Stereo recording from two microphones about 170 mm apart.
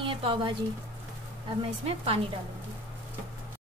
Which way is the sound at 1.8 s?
35° right (ahead or behind).